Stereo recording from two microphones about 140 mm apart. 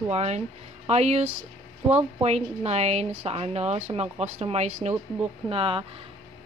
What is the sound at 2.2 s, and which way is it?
Speech, 50° right (ahead or behind).